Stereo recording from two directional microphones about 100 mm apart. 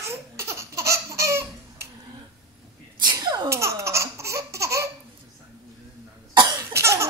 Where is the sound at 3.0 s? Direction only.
45° right (ahead or behind).